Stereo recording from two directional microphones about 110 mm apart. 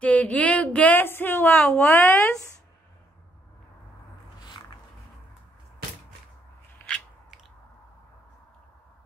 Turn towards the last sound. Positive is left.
turn(degrees=-5)  # may be behind; listen again after turning